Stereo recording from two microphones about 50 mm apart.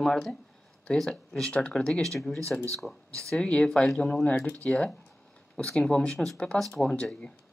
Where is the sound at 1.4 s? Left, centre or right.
Left.